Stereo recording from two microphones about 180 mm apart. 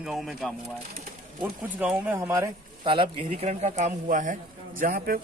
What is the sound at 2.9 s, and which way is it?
Speech, 30° right (ahead or behind).